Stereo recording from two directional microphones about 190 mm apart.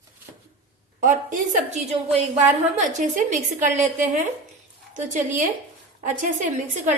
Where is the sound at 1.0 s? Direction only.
40° right (ahead or behind).